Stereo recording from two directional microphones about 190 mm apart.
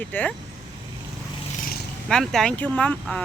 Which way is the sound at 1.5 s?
50° left (ahead or behind).